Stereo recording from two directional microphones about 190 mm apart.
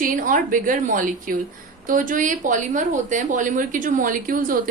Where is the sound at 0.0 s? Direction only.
45° right (ahead or behind).